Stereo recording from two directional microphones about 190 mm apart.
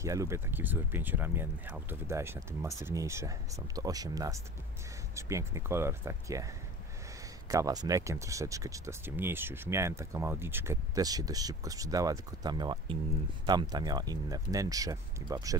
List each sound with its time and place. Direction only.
0.0 s speech: 15° right (ahead or behind)